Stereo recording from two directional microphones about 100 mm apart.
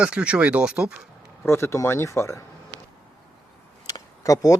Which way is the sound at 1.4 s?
25° left (ahead or behind).